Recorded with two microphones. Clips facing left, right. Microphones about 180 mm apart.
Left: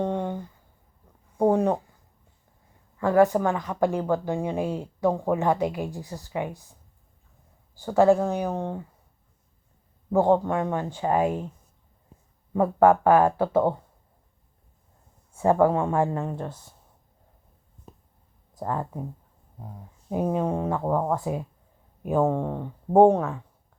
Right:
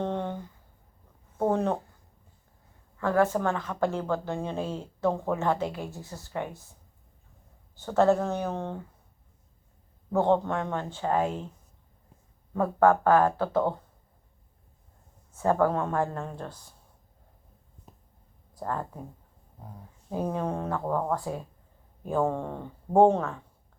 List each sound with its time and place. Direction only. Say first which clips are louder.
0.0 s a sound: left 3 dB; 10° left (ahead or behind)
1.4 s a sound: left 5 dB; 15° left (ahead or behind)
3.0 s speech: left 5 dB; 15° left (ahead or behind)
7.8 s speech: left 4 dB; 10° left (ahead or behind)
10.1 s speech: left 3 dB; 10° left (ahead or behind)
12.5 s speech: left 3 dB; 15° left (ahead or behind)
15.4 s speech: left 4 dB; 20° left (ahead or behind)
18.5 s speech: left 3 dB; 15° left (ahead or behind)
20.1 s speech: left 5 dB; 20° left (ahead or behind)